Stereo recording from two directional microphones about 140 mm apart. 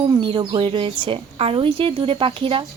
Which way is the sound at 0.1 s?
35° right (ahead or behind).